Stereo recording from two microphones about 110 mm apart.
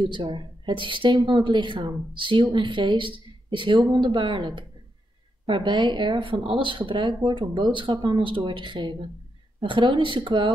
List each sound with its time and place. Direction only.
0.0 s speech: 45° right (ahead or behind)